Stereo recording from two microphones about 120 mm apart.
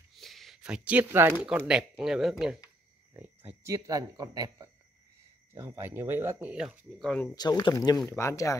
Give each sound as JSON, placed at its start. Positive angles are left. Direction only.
{"t": 0.2, "sound": "a sound", "side_deg": 0}
{"t": 1.7, "sound": "speech", "side_deg": -5}
{"t": 3.1, "sound": "speech", "side_deg": -20}
{"t": 5.5, "sound": "speech", "side_deg": -20}
{"t": 6.5, "sound": "speech", "side_deg": -10}
{"t": 7.0, "sound": "speech", "side_deg": 5}
{"t": 7.3, "sound": "speech", "side_deg": 35}